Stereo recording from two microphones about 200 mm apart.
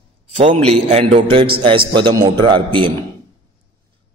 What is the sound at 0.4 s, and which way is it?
A man's voice, 30° right (ahead or behind).